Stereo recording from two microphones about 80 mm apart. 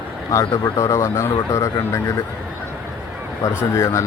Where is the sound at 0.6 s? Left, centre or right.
Left.